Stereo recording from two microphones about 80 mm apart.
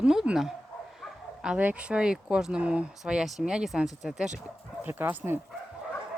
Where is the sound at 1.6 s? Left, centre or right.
Centre.